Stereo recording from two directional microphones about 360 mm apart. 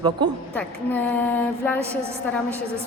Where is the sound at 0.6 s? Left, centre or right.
Centre.